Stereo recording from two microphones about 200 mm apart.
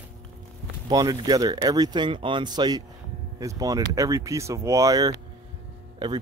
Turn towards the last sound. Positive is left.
turn(degrees=-20)  # may be behind; listen again after turning